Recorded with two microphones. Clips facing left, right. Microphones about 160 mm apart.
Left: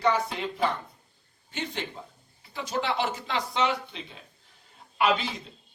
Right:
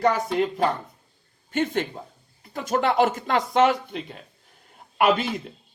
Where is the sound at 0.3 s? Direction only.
45° right (ahead or behind).